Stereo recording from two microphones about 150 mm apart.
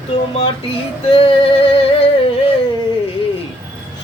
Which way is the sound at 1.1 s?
40° left (ahead or behind).